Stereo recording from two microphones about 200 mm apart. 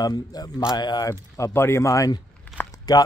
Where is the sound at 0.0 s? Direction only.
20° left (ahead or behind).